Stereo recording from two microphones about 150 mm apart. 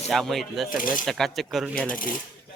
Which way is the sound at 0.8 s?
65° left (ahead or behind).